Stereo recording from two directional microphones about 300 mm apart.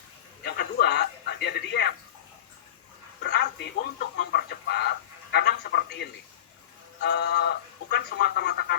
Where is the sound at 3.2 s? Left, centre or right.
Left.